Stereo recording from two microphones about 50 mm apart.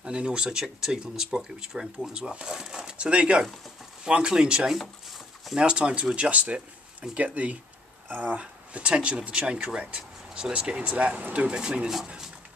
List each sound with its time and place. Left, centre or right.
0.0 s speech: centre